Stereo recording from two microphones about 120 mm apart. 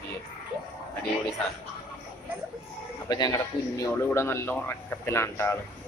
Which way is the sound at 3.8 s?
20° left (ahead or behind).